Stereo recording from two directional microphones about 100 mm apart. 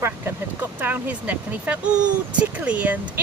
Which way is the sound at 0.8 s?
20° right (ahead or behind).